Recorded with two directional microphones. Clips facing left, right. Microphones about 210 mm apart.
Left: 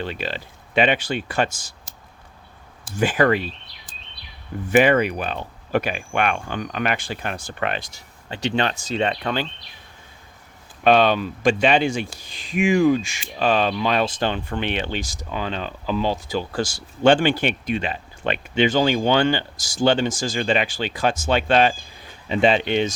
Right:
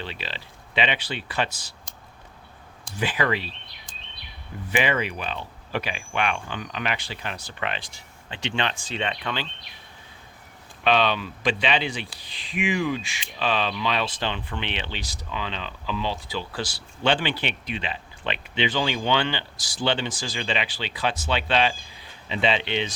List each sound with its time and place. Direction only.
0.0 s speech: 50° left (ahead or behind)
2.9 s speech: 45° left (ahead or behind)
4.7 s speech: 50° left (ahead or behind)
10.8 s speech: 45° left (ahead or behind)